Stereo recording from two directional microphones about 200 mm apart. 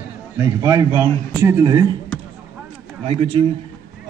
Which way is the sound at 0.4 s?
15° right (ahead or behind).